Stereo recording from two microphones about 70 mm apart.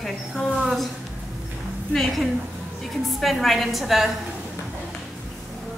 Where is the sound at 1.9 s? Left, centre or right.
Centre.